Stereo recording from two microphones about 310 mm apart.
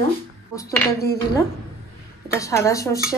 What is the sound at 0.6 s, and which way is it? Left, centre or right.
Speech, left.